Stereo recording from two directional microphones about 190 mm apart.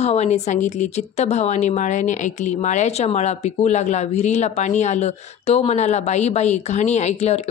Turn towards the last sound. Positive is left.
turn(degrees=35)  # may be behind; listen again after turning